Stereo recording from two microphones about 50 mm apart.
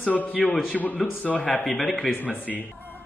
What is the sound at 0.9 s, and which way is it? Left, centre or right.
Speech, left.